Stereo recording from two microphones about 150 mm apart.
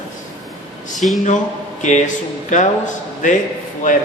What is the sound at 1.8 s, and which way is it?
Speech, 55° left (ahead or behind).